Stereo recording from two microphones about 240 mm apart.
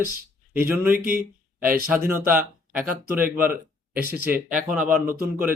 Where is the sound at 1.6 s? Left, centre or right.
Right.